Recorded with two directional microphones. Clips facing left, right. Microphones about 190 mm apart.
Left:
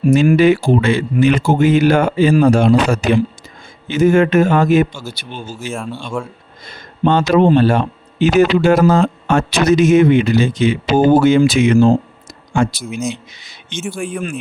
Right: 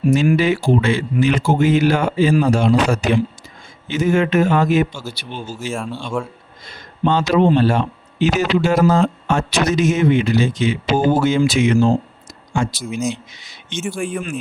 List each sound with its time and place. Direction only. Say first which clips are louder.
0.1 s a man's voice: left 5 dB; 60° left (ahead or behind)
5.7 s speech: left 1 dB; centre (ahead or behind)
6.7 s speech: left 3 dB; 55° left (ahead or behind)
13.8 s speech: left 1 dB; centre (ahead or behind)